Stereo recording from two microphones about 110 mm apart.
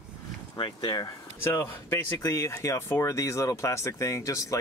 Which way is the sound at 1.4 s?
20° left (ahead or behind).